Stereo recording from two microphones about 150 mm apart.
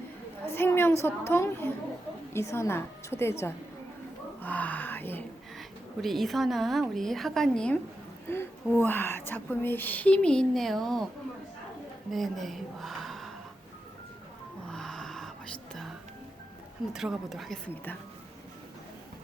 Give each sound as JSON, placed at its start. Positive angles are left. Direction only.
{"t": 0.5, "sound": "a woman's voice", "side_deg": 15}
{"t": 4.4, "sound": "a sound", "side_deg": 10}
{"t": 5.5, "sound": "a woman's voice", "side_deg": 0}
{"t": 12.1, "sound": "a woman's voice", "side_deg": 0}
{"t": 14.7, "sound": "music", "side_deg": 5}
{"t": 16.9, "sound": "a woman's voice", "side_deg": -5}